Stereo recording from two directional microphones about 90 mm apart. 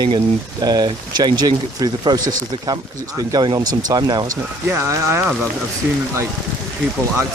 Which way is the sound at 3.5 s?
50° right (ahead or behind).